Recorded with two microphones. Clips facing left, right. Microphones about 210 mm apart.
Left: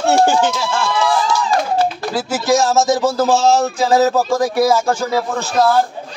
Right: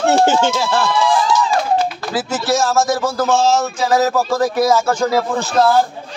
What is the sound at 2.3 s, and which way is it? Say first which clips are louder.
Speech: left 2 dB; 15° left (ahead or behind).